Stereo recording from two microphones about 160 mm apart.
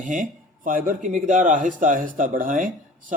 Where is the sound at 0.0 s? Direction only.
55° right (ahead or behind).